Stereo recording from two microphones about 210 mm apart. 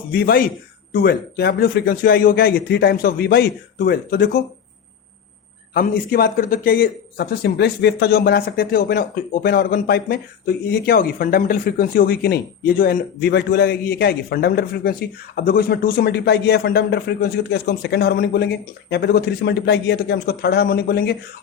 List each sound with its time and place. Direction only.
0.1 s a man's voice: 45° left (ahead or behind)
5.7 s a man's voice: 45° left (ahead or behind)